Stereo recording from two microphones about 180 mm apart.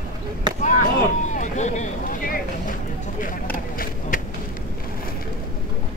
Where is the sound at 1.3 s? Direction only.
40° left (ahead or behind).